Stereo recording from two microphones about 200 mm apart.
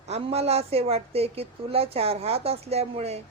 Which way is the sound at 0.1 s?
30° right (ahead or behind).